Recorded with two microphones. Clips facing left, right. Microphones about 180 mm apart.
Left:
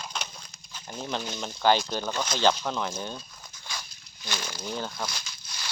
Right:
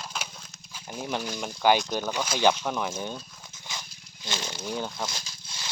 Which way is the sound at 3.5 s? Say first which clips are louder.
Even; 20° right (ahead or behind).